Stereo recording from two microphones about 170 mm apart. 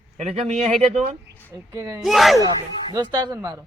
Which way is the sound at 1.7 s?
15° right (ahead or behind).